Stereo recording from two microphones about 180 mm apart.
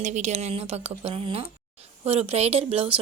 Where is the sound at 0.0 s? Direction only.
40° right (ahead or behind).